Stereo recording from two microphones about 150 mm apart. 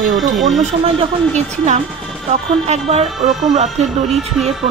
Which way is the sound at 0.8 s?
50° right (ahead or behind).